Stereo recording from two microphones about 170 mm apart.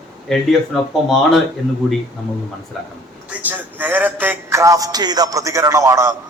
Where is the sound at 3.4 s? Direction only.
10° right (ahead or behind).